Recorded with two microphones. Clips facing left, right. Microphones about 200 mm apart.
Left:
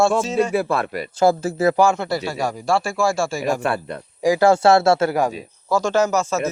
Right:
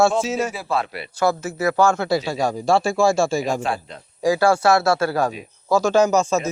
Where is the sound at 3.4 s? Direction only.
60° left (ahead or behind).